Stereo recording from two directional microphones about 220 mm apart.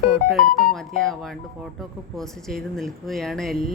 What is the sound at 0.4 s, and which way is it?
Speech, 40° left (ahead or behind).